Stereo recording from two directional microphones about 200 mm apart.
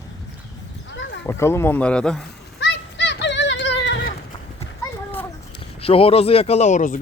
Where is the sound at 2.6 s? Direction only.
60° left (ahead or behind).